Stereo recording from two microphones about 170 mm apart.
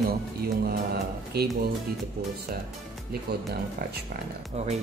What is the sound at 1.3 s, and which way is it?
Speech, 70° right (ahead or behind).